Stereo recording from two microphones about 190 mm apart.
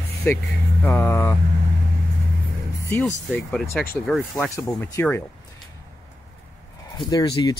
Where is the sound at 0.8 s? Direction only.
10° left (ahead or behind).